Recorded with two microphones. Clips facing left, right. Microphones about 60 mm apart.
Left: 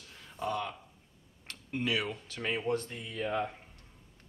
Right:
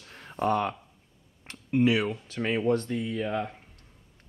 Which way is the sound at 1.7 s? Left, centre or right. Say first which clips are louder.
Right 9 dB; centre.